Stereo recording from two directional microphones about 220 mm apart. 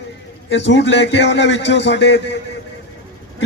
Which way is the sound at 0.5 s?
55° left (ahead or behind).